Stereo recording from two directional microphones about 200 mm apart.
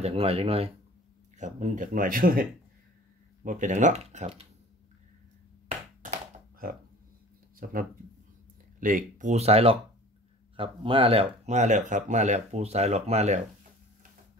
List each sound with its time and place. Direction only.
0.0 s speech: 30° right (ahead or behind); by 2.4 s 45° right (ahead or behind)
3.4 s speech: 40° right (ahead or behind)
7.5 s speech: 45° right (ahead or behind)